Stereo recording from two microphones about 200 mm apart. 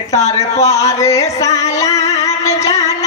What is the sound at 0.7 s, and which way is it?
Speech, 15° left (ahead or behind).